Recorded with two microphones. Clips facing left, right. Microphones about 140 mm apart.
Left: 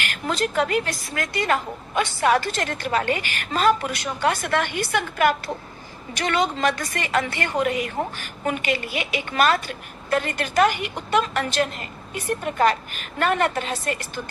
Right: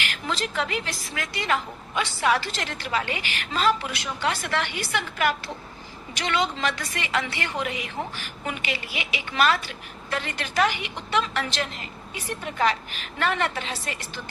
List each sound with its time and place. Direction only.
0.0 s a woman's voice: 50° left (ahead or behind)